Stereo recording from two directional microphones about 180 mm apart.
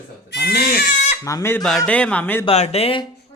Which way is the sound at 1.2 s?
15° left (ahead or behind).